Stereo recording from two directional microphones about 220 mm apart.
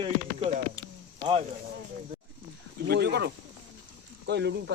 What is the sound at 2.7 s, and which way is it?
Speech, 45° right (ahead or behind).